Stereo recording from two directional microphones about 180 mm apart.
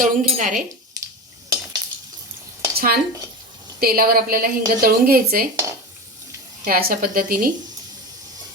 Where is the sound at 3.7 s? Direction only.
55° right (ahead or behind).